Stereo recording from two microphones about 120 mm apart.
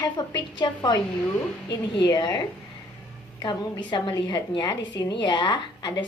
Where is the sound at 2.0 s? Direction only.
35° left (ahead or behind).